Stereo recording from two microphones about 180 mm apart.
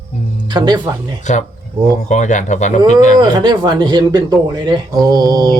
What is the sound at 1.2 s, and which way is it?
Speech, 40° left (ahead or behind).